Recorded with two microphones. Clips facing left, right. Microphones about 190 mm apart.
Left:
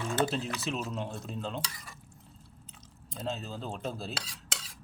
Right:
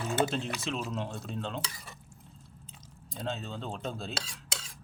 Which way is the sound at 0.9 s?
Centre (ahead or behind).